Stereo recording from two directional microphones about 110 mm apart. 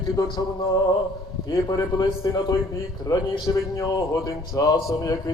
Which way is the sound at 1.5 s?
35° left (ahead or behind).